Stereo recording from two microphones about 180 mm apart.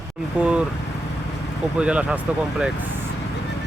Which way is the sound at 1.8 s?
5° right (ahead or behind).